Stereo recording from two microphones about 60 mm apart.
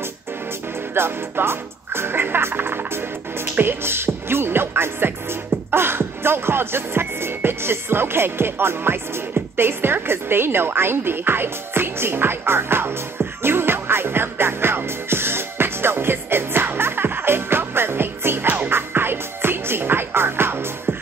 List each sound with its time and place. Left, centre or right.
0.9 s music: right